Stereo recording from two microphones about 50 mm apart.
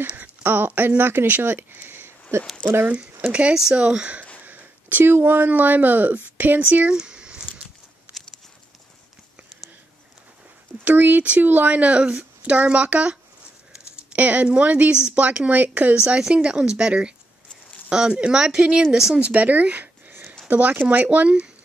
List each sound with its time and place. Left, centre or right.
0.1 s speech: right
2.9 s speech: right
4.5 s a sound: right
5.5 s speech: right
7.0 s a sound: centre
10.8 s speech: right; by 19.1 s centre
19.1 s speech: right